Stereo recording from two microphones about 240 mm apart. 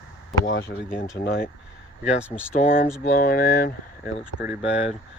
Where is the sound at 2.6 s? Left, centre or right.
Left.